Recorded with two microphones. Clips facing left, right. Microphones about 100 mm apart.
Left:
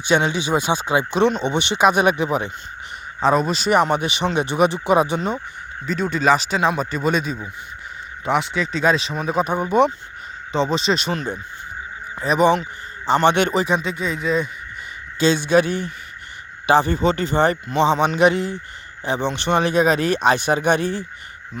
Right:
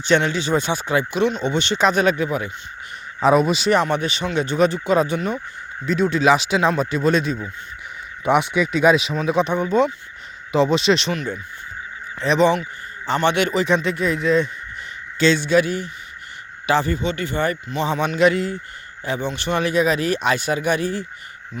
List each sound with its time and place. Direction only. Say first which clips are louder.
0.0 s speech: even; 15° left (ahead or behind)
3.2 s speech: right 2 dB; 5° right (ahead or behind)
3.7 s speech: left 1 dB; 15° left (ahead or behind)
5.8 s speech: right 2 dB; centre (ahead or behind)
8.2 s speech: right 3 dB; 20° right (ahead or behind)
9.6 s speech: left 1 dB; 15° left (ahead or behind)
10.5 s speech: right 3 dB; centre (ahead or behind)
12.1 s speech: right 1 dB; 10° left (ahead or behind)
13.2 s speech: even; 25° left (ahead or behind)
13.7 s speech: right 2 dB; 5° left (ahead or behind)
15.2 s speech: even; 15° left (ahead or behind)
17.0 s speech: left 5 dB; 35° left (ahead or behind)